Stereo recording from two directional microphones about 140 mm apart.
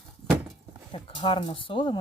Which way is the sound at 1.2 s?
40° left (ahead or behind).